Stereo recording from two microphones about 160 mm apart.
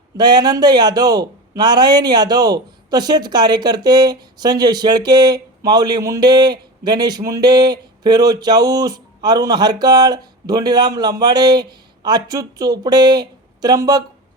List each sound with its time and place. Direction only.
0.2 s a man's voice: 25° right (ahead or behind)